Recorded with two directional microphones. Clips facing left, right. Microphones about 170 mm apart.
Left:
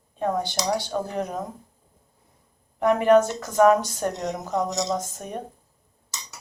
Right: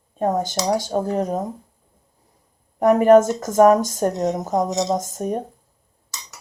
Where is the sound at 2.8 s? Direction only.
45° right (ahead or behind).